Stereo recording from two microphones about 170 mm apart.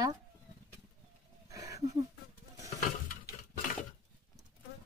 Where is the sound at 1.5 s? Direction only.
20° right (ahead or behind).